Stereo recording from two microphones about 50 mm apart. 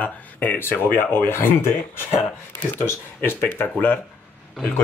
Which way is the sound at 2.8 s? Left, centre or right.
Left.